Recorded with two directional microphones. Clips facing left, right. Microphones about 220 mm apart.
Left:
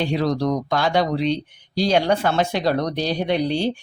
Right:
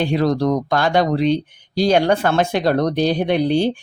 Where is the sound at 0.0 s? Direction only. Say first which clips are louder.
Right 3 dB; 50° right (ahead or behind).